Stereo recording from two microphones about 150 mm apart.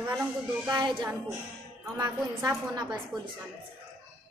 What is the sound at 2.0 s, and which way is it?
A woman's voice, 25° right (ahead or behind).